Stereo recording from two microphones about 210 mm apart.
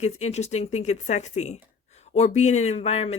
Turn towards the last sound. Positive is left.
turn(degrees=30)  # may be behind; listen again after turning